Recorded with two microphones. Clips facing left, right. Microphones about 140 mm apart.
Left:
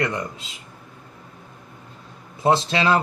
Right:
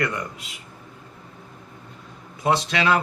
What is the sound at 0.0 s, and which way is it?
Speech, 25° left (ahead or behind).